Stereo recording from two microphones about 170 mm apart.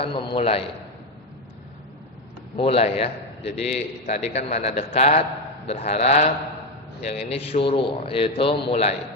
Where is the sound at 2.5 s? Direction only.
35° left (ahead or behind).